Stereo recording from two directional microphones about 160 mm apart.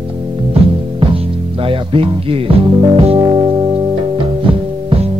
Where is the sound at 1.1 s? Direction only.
35° right (ahead or behind).